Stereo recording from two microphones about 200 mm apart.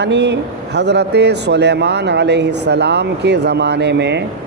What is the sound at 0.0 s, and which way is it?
Speech, 60° right (ahead or behind).